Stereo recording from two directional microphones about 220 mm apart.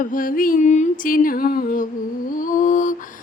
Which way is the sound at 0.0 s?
40° left (ahead or behind).